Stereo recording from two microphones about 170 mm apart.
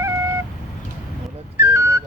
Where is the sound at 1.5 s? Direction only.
15° right (ahead or behind).